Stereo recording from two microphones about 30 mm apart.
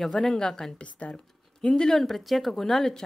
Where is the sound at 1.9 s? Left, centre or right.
Centre.